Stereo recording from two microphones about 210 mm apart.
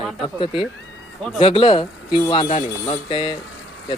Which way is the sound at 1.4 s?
25° left (ahead or behind).